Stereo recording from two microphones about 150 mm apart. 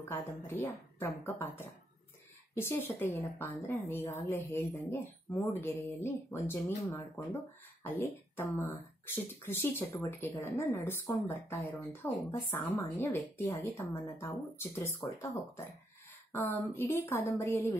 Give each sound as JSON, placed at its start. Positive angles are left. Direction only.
{"t": 0.1, "sound": "speech", "side_deg": 15}
{"t": 16.3, "sound": "speech", "side_deg": 15}